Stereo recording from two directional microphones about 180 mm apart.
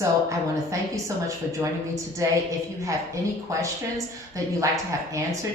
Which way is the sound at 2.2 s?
15° right (ahead or behind).